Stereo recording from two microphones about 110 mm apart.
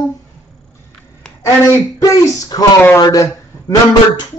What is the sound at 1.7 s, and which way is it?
Speech, 30° left (ahead or behind).